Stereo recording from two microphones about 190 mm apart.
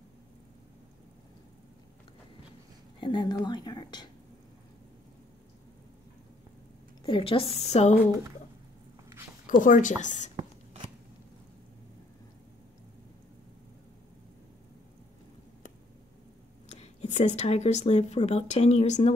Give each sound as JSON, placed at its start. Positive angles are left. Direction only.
{"t": 3.0, "sound": "a woman's voice", "side_deg": 25}
{"t": 7.0, "sound": "a woman's voice", "side_deg": 25}
{"t": 9.5, "sound": "a woman's voice", "side_deg": 45}
{"t": 10.3, "sound": "a sound", "side_deg": -35}
{"t": 16.6, "sound": "speech", "side_deg": 35}